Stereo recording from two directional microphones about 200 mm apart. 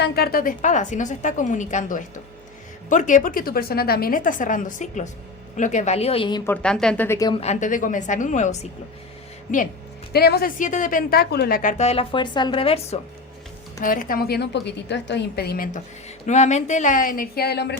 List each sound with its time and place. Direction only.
0.0 s a woman's voice: 50° left (ahead or behind); by 6.4 s 25° left (ahead or behind)
6.4 s speech: 5° left (ahead or behind)
7.3 s speech: 35° left (ahead or behind)
10.1 s speech: 55° left (ahead or behind); by 13.0 s 30° left (ahead or behind)
13.8 s a woman's voice: 45° left (ahead or behind)
16.2 s speech: 35° left (ahead or behind); by 17.7 s 55° left (ahead or behind)